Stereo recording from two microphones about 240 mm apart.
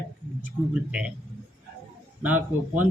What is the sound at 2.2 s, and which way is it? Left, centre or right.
Speech, centre.